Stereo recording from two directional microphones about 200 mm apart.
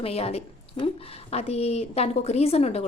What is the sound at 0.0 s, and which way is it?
A woman's voice, 30° left (ahead or behind).